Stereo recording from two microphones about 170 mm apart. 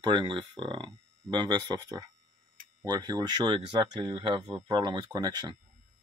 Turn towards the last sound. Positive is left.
turn(degrees=-25)  # may be behind; listen again after turning